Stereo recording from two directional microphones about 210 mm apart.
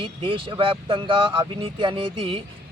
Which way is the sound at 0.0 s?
25° right (ahead or behind).